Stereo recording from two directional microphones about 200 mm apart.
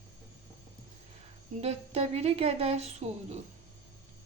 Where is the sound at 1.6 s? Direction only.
30° right (ahead or behind).